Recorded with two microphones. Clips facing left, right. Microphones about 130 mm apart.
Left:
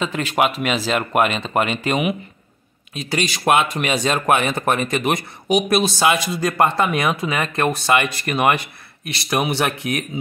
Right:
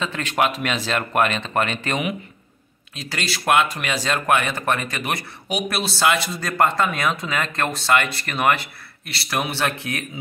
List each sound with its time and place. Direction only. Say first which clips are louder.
0.0 s speech: left 2 dB; 10° left (ahead or behind)